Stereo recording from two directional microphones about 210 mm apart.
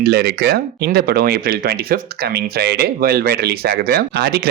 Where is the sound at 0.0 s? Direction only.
50° right (ahead or behind).